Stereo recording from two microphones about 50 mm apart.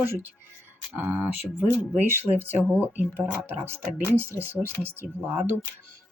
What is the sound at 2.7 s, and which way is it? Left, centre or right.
Speech, right.